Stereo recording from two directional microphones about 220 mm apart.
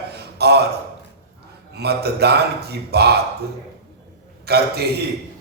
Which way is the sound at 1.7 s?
45° right (ahead or behind).